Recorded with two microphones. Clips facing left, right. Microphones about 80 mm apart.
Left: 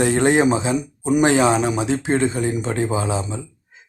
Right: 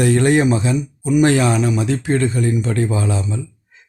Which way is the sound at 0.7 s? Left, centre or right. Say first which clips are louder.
Right 1 dB; left.